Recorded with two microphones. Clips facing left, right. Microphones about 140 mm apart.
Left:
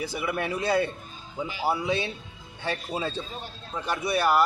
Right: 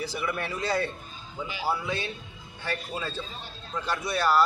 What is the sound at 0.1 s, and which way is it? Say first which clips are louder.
A man's voice: left 3 dB; 10° left (ahead or behind).